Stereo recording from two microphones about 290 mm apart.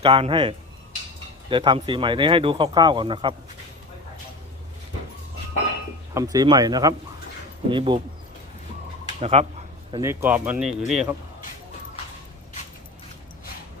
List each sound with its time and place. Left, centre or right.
0.0 s speech: centre
6.1 s speech: centre
9.2 s speech: centre
9.9 s speech: centre